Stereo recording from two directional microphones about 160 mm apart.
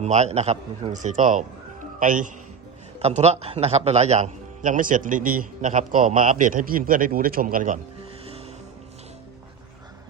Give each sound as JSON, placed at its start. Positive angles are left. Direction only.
{"t": 0.0, "sound": "a man's voice", "side_deg": -45}
{"t": 3.0, "sound": "a man's voice", "side_deg": -45}
{"t": 8.2, "sound": "music", "side_deg": -35}